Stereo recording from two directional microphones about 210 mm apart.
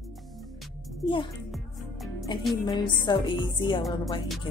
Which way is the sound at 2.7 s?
20° left (ahead or behind).